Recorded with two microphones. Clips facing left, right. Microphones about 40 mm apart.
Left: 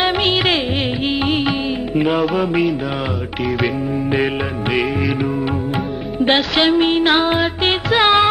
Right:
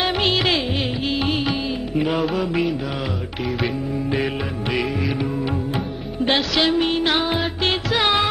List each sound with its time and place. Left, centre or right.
0.0 s music: centre
6.5 s music: left